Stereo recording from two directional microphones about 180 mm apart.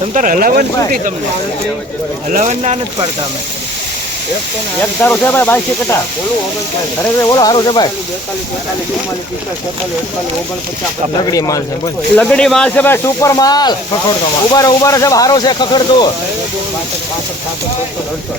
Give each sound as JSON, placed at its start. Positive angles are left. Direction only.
{"t": 0.1, "sound": "speech", "side_deg": -45}
{"t": 2.3, "sound": "speech", "side_deg": -40}
{"t": 4.8, "sound": "speech", "side_deg": 10}
{"t": 7.2, "sound": "speech", "side_deg": 20}
{"t": 11.3, "sound": "speech", "side_deg": 20}
{"t": 12.1, "sound": "speech", "side_deg": 5}